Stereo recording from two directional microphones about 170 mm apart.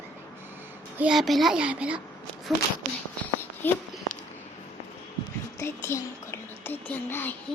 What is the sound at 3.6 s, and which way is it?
Speech, 10° left (ahead or behind).